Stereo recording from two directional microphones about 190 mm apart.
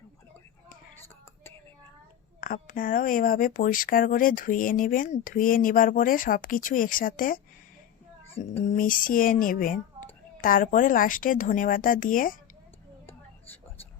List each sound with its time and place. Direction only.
2.4 s speech: 50° left (ahead or behind)
8.4 s speech: 35° left (ahead or behind)
8.8 s speech: 45° left (ahead or behind)